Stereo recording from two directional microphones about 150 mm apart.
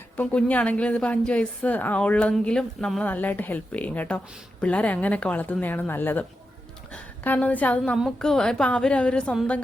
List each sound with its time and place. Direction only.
0.2 s a woman's voice: 10° left (ahead or behind)